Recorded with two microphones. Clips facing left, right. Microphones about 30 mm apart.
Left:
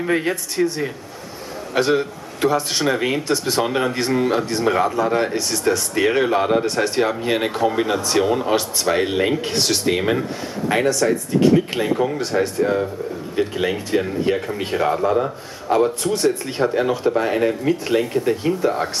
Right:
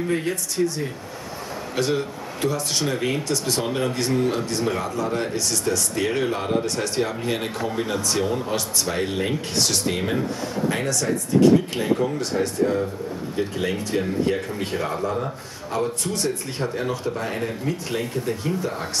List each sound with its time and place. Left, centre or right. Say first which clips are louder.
0.0 s speech: left 4 dB; left